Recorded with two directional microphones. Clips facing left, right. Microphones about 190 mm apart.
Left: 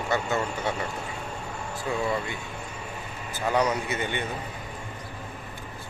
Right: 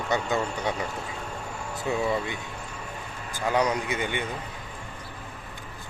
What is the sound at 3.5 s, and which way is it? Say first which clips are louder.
Speech: even; 10° right (ahead or behind).